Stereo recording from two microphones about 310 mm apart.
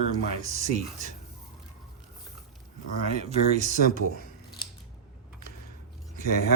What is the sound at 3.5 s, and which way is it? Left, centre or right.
Speech, right.